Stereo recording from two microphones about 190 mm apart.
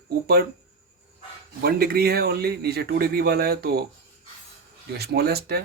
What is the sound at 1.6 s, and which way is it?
A man's voice, 55° right (ahead or behind).